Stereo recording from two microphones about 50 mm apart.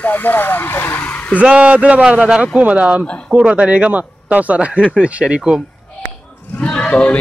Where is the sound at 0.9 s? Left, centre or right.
Left.